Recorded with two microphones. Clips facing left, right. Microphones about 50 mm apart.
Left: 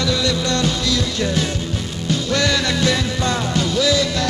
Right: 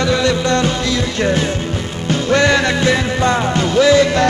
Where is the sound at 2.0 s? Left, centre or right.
Right.